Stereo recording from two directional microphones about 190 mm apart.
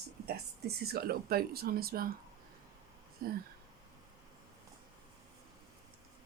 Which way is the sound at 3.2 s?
50° right (ahead or behind).